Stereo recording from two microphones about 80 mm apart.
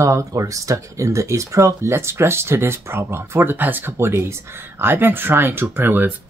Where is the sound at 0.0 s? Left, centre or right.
Right.